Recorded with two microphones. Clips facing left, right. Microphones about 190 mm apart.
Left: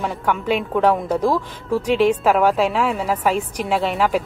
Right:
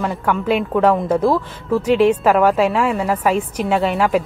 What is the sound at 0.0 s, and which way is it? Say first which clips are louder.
A woman's voice: right 2 dB; centre (ahead or behind).